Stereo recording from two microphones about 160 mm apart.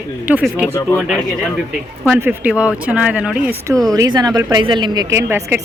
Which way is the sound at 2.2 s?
10° right (ahead or behind).